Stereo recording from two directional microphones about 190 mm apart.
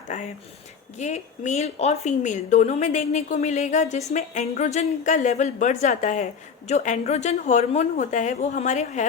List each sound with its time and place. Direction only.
0.1 s a woman's voice: 40° left (ahead or behind)